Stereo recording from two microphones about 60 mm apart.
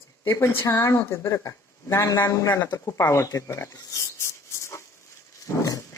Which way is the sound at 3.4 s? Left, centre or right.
Left.